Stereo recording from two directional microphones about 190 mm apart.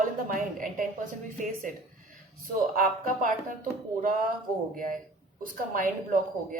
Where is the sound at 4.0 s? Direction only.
45° right (ahead or behind).